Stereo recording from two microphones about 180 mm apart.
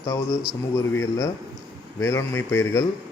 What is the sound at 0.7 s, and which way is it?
A man's voice, 15° left (ahead or behind).